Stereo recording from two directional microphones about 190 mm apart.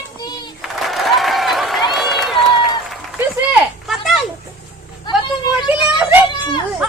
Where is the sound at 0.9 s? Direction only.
Centre (ahead or behind).